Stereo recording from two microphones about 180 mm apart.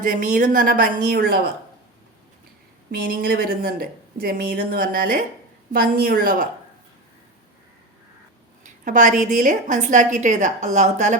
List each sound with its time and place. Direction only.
0.0 s a woman's voice: 45° right (ahead or behind)
2.9 s a woman's voice: 55° right (ahead or behind)
8.6 s a woman's voice: 45° right (ahead or behind)